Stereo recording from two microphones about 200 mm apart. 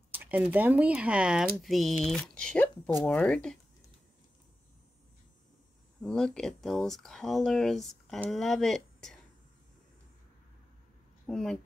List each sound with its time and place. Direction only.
0.1 s speech: 10° right (ahead or behind)
6.0 s speech: 5° left (ahead or behind)
11.2 s speech: 5° left (ahead or behind)